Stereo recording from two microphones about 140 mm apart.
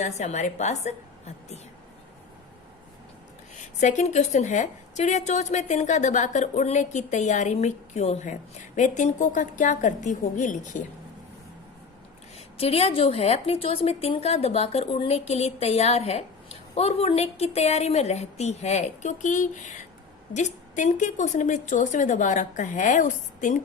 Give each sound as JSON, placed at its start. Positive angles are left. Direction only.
{"t": 0.0, "sound": "a woman's voice", "side_deg": 55}
{"t": 3.5, "sound": "a woman's voice", "side_deg": 60}
{"t": 12.5, "sound": "a woman's voice", "side_deg": 45}